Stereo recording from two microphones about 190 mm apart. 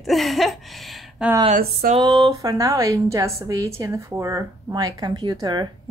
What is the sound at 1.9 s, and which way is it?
A woman's voice, 25° right (ahead or behind).